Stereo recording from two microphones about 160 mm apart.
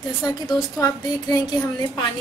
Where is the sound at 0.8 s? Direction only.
25° left (ahead or behind).